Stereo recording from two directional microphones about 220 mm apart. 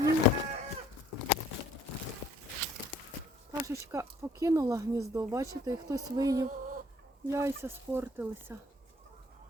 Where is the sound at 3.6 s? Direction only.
15° right (ahead or behind).